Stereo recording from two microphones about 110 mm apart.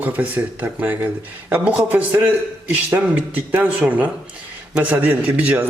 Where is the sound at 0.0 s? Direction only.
15° right (ahead or behind).